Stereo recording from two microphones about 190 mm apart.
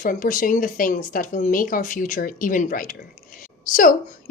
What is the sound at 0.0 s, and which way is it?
A woman's voice, 45° left (ahead or behind).